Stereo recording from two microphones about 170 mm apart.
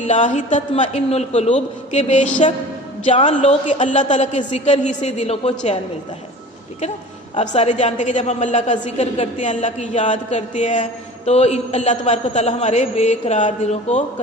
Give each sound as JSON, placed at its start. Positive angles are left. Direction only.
{"t": 0.1, "sound": "a woman's voice", "side_deg": 45}
{"t": 7.5, "sound": "a woman's voice", "side_deg": 40}